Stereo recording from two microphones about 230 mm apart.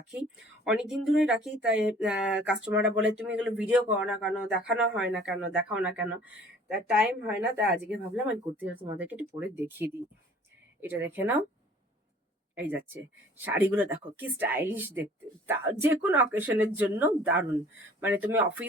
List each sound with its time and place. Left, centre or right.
0.6 s speech: centre
12.5 s speech: centre